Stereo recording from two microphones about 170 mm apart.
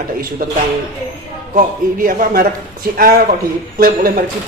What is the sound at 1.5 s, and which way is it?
Speech, 55° right (ahead or behind).